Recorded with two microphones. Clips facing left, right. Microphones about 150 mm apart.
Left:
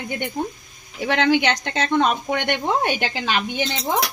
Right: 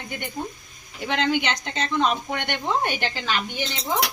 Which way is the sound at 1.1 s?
75° left (ahead or behind).